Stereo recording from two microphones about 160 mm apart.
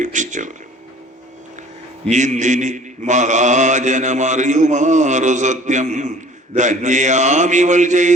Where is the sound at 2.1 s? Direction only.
50° right (ahead or behind).